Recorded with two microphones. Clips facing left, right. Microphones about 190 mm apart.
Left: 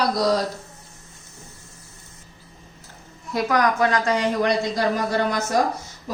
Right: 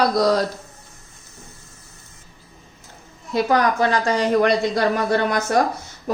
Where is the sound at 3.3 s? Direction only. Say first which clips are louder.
Right 2 dB; 30° right (ahead or behind).